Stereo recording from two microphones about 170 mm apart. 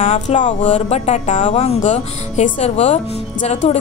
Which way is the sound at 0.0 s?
45° left (ahead or behind).